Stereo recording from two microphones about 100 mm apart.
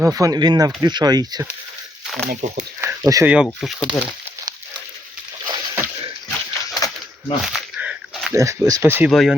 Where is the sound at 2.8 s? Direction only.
25° right (ahead or behind).